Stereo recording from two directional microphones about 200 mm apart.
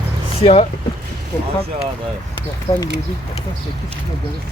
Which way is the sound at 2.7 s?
25° left (ahead or behind).